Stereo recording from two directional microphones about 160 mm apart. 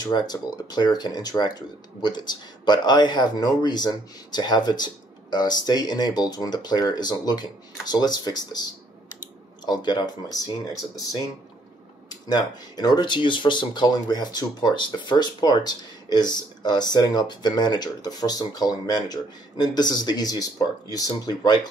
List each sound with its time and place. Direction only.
0.0 s speech: 25° left (ahead or behind)
9.7 s speech: 25° left (ahead or behind)